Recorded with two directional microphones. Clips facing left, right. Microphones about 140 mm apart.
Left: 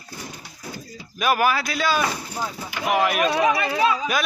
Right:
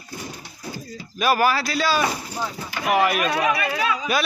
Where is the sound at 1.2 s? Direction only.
Centre (ahead or behind).